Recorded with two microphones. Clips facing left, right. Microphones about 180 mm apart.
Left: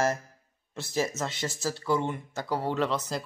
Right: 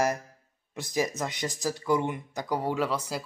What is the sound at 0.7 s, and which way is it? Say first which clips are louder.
Speech: right 1 dB; 15° right (ahead or behind).